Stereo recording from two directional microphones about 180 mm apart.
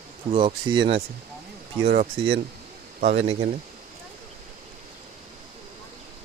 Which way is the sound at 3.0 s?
40° right (ahead or behind).